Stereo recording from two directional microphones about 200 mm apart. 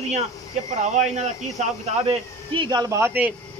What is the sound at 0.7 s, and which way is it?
Speech, 35° right (ahead or behind).